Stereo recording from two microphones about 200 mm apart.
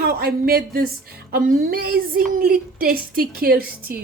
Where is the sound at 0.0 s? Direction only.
50° right (ahead or behind).